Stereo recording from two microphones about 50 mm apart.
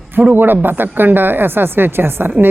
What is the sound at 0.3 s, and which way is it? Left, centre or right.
A woman's voice, right.